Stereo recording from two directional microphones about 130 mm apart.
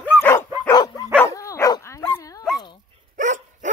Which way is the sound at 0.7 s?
30° left (ahead or behind).